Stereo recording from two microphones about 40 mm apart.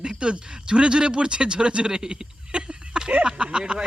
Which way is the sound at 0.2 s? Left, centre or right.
Right.